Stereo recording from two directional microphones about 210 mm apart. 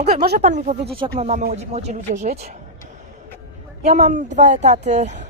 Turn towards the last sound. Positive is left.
turn(degrees=-35)  # may be behind; listen again after turning